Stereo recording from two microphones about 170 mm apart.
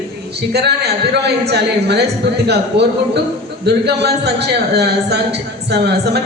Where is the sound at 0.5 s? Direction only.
75° right (ahead or behind).